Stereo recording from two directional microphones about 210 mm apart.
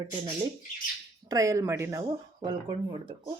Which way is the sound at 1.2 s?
15° right (ahead or behind).